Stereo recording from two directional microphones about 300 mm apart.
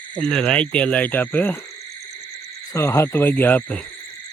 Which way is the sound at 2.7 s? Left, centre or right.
Centre.